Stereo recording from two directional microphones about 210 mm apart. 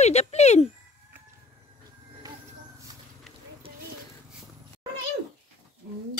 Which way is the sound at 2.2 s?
15° right (ahead or behind).